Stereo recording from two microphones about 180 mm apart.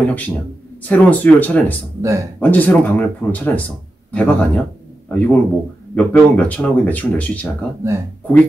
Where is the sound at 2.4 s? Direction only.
10° left (ahead or behind).